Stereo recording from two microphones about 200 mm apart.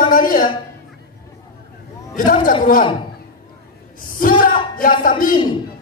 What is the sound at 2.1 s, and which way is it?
Speech, 45° left (ahead or behind).